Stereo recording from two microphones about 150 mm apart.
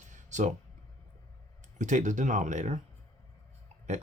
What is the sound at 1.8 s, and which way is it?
Speech, 55° right (ahead or behind).